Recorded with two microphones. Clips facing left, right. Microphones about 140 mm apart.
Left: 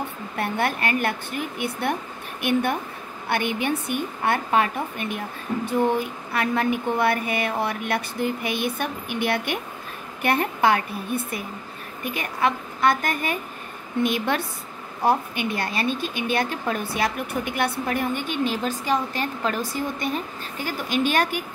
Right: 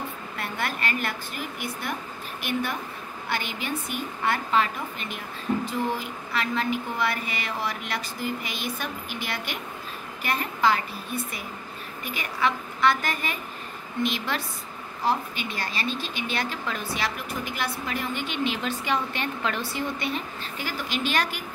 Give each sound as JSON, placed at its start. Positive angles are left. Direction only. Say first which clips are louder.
{"t": 0.4, "sound": "speech", "louder": "left 6 dB", "side_deg": 55}